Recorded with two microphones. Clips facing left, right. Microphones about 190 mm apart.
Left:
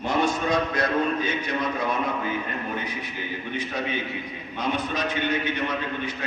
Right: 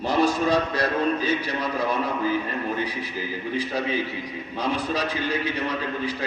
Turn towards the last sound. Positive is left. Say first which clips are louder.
# right 1 dB
turn(degrees=-35)  # may be behind; listen again after turning